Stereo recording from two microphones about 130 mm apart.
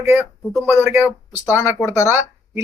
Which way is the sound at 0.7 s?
15° right (ahead or behind).